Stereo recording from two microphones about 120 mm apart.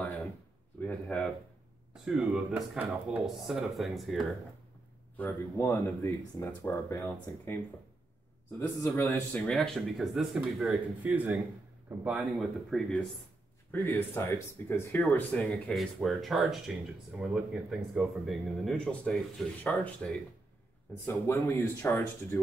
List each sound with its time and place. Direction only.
1.0 s speech: 5° left (ahead or behind)
5.1 s speech: 20° left (ahead or behind)
8.5 s speech: 25° left (ahead or behind)
9.5 s speech: centre (ahead or behind)
11.0 s speech: 10° right (ahead or behind)
12.2 s speech: centre (ahead or behind)
13.7 s speech: 15° left (ahead or behind)
15.4 s speech: centre (ahead or behind); by 22.4 s 20° left (ahead or behind)